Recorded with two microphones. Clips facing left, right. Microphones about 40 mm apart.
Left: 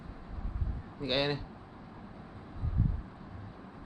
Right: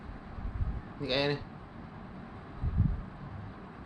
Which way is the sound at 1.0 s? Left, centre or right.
Left.